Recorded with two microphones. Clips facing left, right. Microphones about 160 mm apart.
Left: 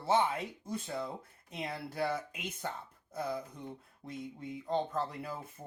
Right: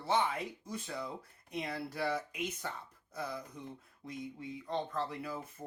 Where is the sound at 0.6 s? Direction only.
25° left (ahead or behind).